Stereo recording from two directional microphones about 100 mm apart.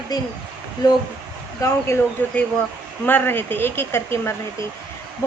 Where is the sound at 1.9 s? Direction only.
30° left (ahead or behind).